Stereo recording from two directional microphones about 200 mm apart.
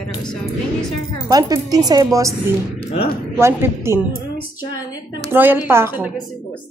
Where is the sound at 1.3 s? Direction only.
20° right (ahead or behind).